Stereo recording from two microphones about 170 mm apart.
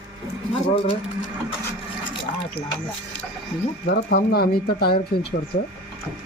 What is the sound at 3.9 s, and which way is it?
Speech, 65° left (ahead or behind).